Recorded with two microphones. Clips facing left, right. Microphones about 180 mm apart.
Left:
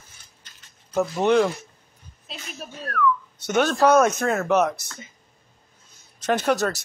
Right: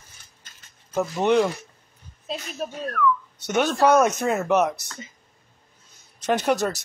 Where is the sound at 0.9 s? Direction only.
5° right (ahead or behind).